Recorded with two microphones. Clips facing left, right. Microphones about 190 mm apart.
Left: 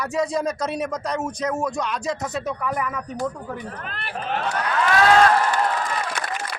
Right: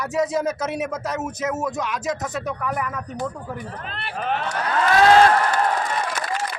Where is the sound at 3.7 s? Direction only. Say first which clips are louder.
Right 1 dB; 30° right (ahead or behind).